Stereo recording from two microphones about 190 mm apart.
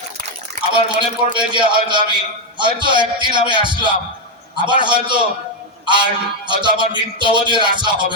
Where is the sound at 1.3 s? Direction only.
25° right (ahead or behind).